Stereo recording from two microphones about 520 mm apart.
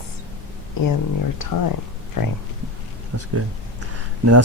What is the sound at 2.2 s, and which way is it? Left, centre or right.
Speech, left.